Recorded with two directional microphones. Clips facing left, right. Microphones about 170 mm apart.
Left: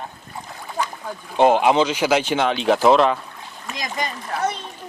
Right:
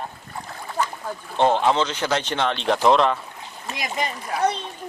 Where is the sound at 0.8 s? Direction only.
5° right (ahead or behind).